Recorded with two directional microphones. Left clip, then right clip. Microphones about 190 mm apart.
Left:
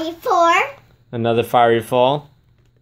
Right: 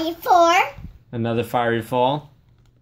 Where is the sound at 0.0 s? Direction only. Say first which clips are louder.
Even; centre (ahead or behind).